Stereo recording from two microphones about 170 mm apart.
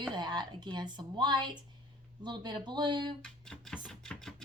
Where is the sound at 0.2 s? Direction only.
25° right (ahead or behind).